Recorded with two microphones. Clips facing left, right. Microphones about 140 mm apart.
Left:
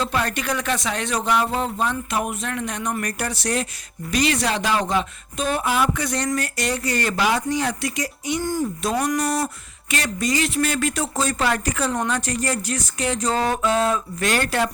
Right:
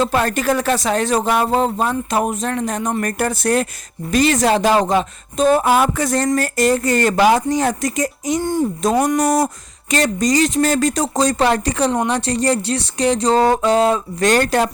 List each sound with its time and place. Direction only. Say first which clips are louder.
0.0 s speech: right 7 dB; 45° right (ahead or behind)